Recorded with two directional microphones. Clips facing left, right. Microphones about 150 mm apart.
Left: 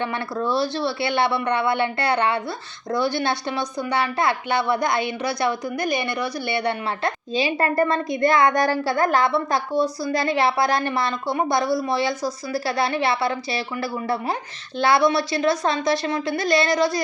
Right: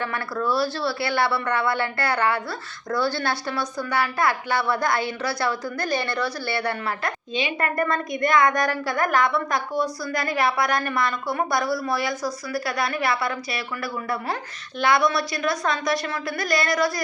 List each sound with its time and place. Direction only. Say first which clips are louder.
0.0 s a woman's voice: left 2 dB; 20° left (ahead or behind)
7.3 s a woman's voice: left 4 dB; 30° left (ahead or behind)